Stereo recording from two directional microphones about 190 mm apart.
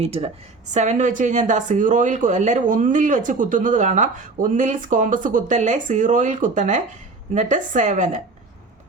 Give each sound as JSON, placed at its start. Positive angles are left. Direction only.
{"t": 0.0, "sound": "speech", "side_deg": -35}